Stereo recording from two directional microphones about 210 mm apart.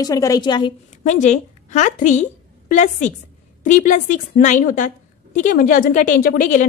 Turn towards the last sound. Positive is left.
turn(degrees=40)  # may be behind; listen again after turning